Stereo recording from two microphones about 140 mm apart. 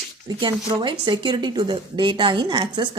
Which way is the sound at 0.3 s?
30° right (ahead or behind).